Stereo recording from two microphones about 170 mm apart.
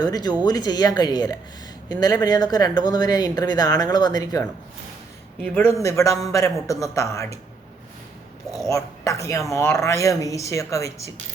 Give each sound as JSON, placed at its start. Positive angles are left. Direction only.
{"t": 0.0, "sound": "a woman's voice", "side_deg": 25}
{"t": 8.4, "sound": "a woman's voice", "side_deg": 20}